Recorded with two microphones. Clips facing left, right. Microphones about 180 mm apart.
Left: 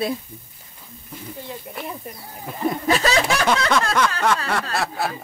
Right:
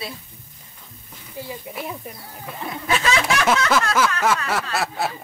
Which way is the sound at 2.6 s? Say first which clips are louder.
Left 3 dB; 40° left (ahead or behind).